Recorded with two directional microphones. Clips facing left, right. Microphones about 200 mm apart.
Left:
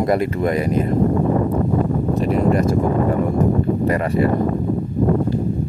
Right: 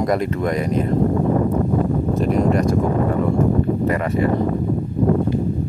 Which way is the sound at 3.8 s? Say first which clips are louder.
Left 1 dB; 35° left (ahead or behind).